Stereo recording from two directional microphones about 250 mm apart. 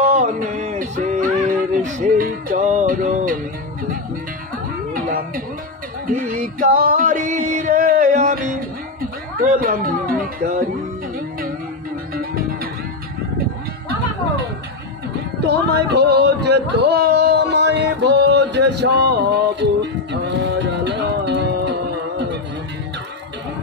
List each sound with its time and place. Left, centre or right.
0.0 s music: right
4.9 s music: right
12.1 s music: right
15.4 s a sound: right
19.6 s music: right